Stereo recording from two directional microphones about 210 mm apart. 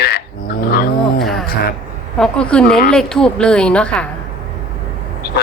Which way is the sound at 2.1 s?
5° left (ahead or behind).